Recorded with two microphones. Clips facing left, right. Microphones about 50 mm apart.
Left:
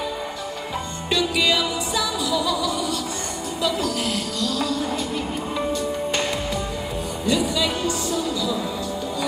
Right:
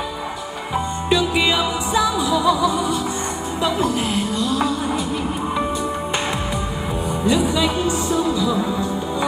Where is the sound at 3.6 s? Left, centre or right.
Right.